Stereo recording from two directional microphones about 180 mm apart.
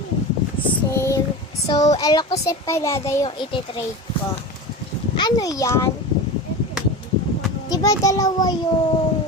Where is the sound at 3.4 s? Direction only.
25° left (ahead or behind).